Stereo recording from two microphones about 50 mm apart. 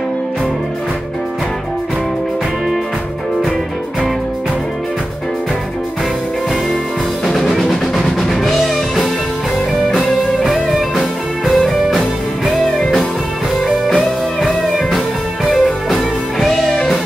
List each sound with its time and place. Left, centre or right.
7.4 s music: centre
13.7 s music: centre
15.5 s music: centre